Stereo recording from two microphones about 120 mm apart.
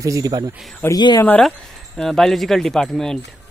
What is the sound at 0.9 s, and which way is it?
Speech, 35° left (ahead or behind).